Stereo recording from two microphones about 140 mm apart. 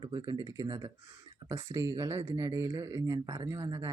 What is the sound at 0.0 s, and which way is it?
Speech, 35° right (ahead or behind).